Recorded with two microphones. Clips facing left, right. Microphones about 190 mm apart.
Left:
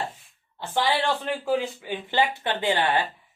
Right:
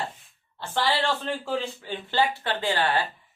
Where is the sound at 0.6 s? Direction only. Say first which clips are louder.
Left 1 dB; 15° left (ahead or behind).